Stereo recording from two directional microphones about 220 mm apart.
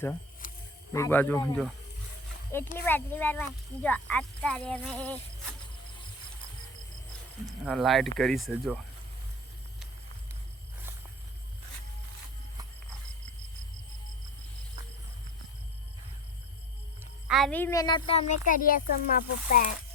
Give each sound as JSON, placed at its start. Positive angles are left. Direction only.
{"t": 0.4, "sound": "a sound", "side_deg": 40}
{"t": 0.9, "sound": "speech", "side_deg": 10}
{"t": 2.7, "sound": "speech", "side_deg": 10}
{"t": 7.4, "sound": "speech", "side_deg": 0}
{"t": 17.2, "sound": "speech", "side_deg": 0}
{"t": 18.3, "sound": "a child's voice", "side_deg": 40}